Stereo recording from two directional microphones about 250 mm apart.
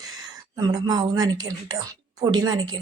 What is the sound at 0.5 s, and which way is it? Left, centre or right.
Speech, centre.